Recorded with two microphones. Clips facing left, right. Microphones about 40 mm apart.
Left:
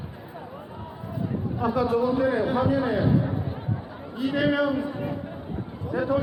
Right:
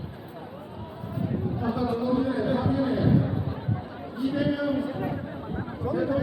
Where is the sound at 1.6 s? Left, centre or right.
Left.